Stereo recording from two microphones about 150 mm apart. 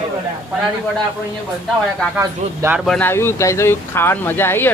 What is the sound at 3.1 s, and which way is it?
Speech, 15° left (ahead or behind).